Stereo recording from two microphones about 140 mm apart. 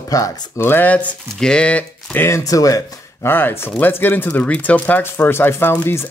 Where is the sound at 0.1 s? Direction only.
25° left (ahead or behind).